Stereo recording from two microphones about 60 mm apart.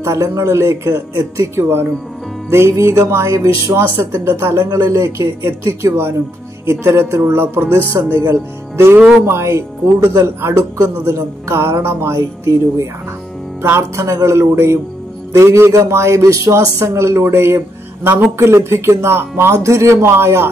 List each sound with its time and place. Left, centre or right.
0.0 s a man's voice: right
2.5 s speech: right
3.1 s a man's voice: right
16.2 s a man's voice: right